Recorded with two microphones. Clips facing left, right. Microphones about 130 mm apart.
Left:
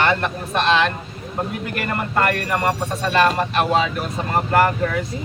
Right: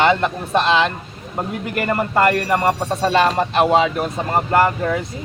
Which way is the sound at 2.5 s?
25° right (ahead or behind).